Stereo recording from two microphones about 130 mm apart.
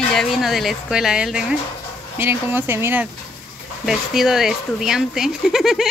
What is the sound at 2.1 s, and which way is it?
Speech, 15° right (ahead or behind).